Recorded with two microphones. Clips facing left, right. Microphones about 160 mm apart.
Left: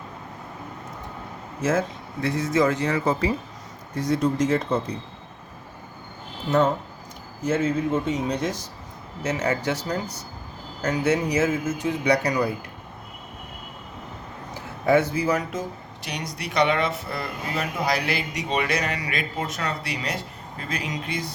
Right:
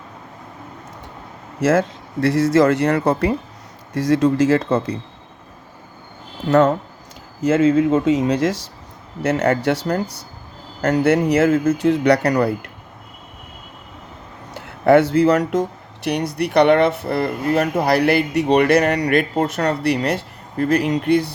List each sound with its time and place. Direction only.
1.6 s speech: 80° right
3.9 s speech: 90° right
6.5 s speech: 80° right
9.2 s speech: 65° right (ahead or behind)
14.5 s speech: 70° right (ahead or behind)